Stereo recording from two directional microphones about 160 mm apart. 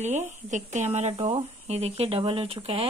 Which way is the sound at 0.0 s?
45° right (ahead or behind).